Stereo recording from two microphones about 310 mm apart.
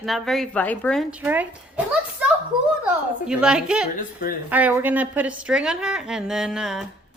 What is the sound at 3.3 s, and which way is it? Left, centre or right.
A woman's voice, centre.